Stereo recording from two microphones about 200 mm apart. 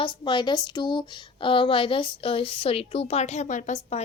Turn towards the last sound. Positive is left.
turn(degrees=35)  # may be behind; listen again after turning